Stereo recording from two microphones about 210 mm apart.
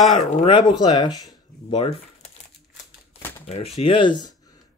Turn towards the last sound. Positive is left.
turn(degrees=20)  # may be behind; listen again after turning